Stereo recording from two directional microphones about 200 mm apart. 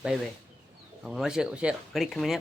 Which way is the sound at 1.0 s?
Centre (ahead or behind).